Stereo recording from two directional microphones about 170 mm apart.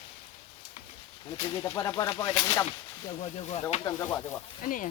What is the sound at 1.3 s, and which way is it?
Speech, 20° left (ahead or behind).